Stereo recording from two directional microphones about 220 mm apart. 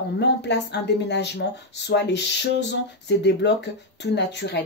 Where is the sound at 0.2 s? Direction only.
50° left (ahead or behind).